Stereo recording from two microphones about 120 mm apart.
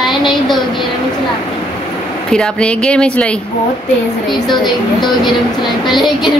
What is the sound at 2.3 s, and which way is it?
Speech, 5° left (ahead or behind).